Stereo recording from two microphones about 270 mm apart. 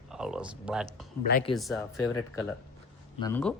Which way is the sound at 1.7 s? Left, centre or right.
Centre.